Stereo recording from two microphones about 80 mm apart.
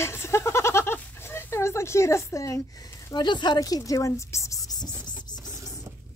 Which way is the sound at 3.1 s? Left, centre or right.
Left.